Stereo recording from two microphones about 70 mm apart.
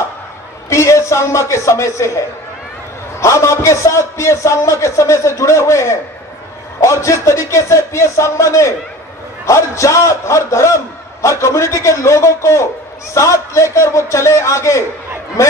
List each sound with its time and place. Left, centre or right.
0.7 s a man's voice: left
3.2 s a man's voice: left